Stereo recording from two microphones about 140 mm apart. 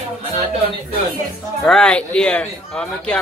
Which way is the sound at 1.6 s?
5° left (ahead or behind).